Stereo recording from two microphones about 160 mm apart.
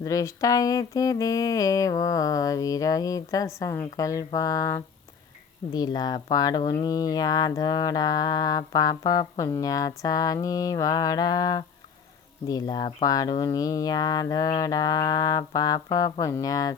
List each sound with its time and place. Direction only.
0.0 s speech: 20° left (ahead or behind)